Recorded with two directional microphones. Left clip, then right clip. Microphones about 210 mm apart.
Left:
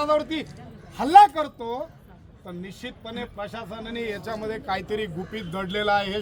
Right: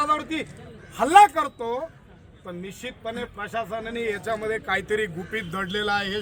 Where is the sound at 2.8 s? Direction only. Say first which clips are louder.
Right 3 dB; 10° left (ahead or behind).